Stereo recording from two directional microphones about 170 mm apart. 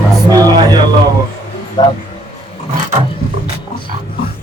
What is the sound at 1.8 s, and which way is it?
Speech, 25° left (ahead or behind).